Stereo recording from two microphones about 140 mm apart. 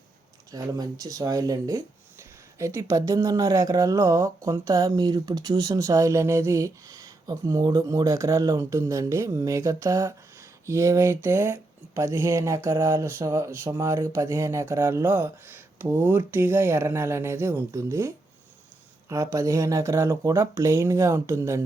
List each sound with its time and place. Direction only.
0.5 s speech: 25° right (ahead or behind)